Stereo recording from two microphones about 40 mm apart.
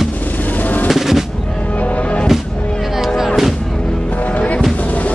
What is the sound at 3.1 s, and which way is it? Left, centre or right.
Music, centre.